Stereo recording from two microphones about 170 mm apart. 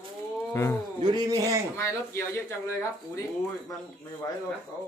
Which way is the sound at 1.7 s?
15° left (ahead or behind).